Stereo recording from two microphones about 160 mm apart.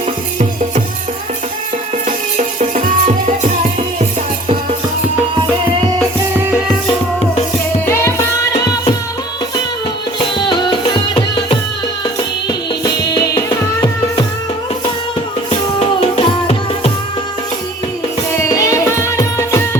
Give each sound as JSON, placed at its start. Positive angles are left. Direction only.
{"t": 7.9, "sound": "music", "side_deg": 15}
{"t": 10.2, "sound": "music", "side_deg": 30}
{"t": 16.1, "sound": "music", "side_deg": 40}
{"t": 18.4, "sound": "music", "side_deg": 20}